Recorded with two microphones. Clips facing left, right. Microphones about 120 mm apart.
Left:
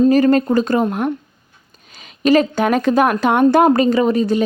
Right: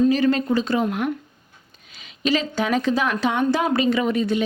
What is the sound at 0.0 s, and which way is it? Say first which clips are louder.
Speech: left 6 dB; 45° left (ahead or behind).